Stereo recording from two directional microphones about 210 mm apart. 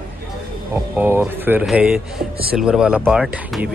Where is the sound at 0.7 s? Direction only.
10° right (ahead or behind).